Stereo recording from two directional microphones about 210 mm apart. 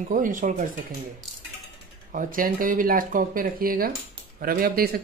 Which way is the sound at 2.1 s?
40° right (ahead or behind).